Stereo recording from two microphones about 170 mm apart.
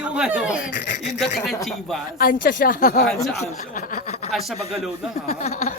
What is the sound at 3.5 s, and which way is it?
Snicker, 45° left (ahead or behind).